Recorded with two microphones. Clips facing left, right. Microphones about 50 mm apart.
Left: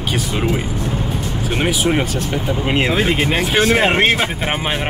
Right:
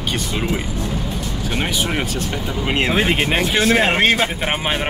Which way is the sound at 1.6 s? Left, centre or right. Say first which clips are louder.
Left 6 dB; centre.